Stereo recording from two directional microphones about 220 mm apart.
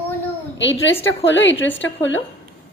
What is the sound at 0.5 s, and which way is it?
A woman's voice, 55° left (ahead or behind).